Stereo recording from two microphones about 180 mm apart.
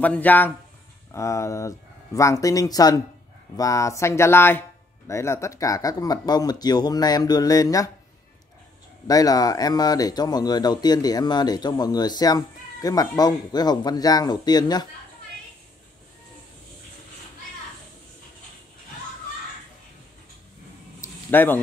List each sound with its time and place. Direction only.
0.0 s speech: 10° left (ahead or behind)
9.0 s speech: 20° left (ahead or behind)
21.0 s a sound: 10° left (ahead or behind)